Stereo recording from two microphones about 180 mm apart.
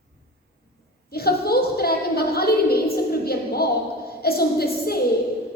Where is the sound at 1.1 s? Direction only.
60° left (ahead or behind).